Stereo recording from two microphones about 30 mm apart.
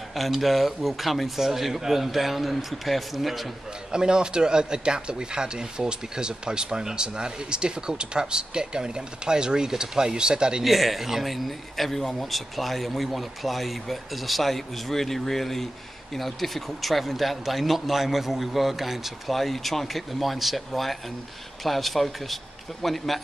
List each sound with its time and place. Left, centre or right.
0.4 s speech: centre
3.9 s speech: right
10.6 s speech: centre
11.2 s speech: centre